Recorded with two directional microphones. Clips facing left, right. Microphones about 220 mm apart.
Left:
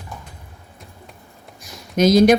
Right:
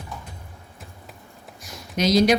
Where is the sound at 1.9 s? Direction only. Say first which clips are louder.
Left 5 dB; 50° left (ahead or behind).